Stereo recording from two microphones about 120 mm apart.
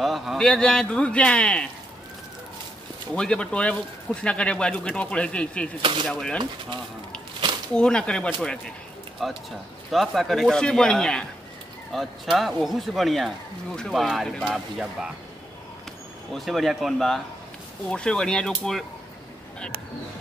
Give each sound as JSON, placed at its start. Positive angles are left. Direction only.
{"t": 0.0, "sound": "speech", "side_deg": 0}
{"t": 3.2, "sound": "speech", "side_deg": 10}
{"t": 5.8, "sound": "speech", "side_deg": -45}
{"t": 6.0, "sound": "speech", "side_deg": 5}
{"t": 7.7, "sound": "speech", "side_deg": 5}
{"t": 16.3, "sound": "speech", "side_deg": 0}